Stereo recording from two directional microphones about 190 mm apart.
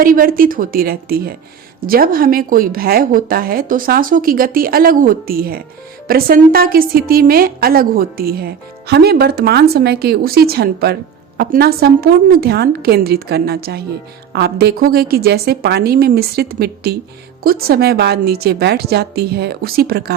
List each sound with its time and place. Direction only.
0.0 s a woman's voice: 50° right (ahead or behind)